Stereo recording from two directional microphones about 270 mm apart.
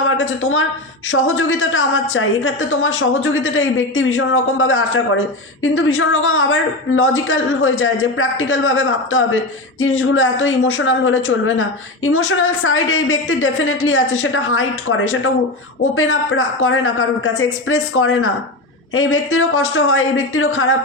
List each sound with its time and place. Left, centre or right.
0.2 s a woman's voice: left